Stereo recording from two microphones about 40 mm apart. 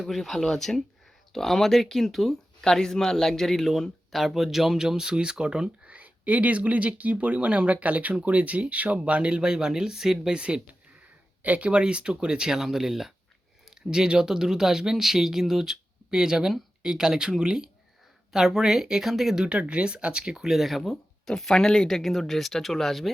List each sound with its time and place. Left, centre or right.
0.0 s speech: centre
4.2 s speech: centre
11.4 s speech: right
11.7 s speech: right; by 19.5 s centre
19.5 s speech: right
20.5 s speech: centre